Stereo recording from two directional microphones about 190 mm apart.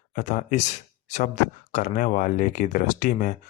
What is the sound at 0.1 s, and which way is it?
Speech, 40° left (ahead or behind).